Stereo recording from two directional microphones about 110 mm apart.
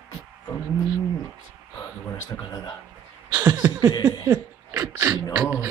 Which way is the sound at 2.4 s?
40° left (ahead or behind).